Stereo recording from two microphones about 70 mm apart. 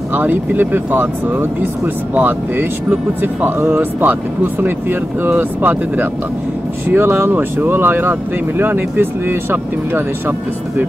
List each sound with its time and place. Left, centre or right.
0.1 s speech: right